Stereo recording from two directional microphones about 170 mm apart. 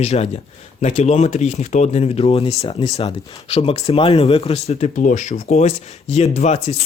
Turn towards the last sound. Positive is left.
turn(degrees=40)  # may be behind; listen again after turning